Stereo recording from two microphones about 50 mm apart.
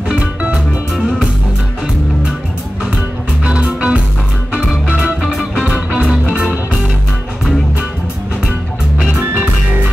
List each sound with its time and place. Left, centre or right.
0.1 s music: right
3.4 s music: right
5.2 s music: centre
5.9 s music: centre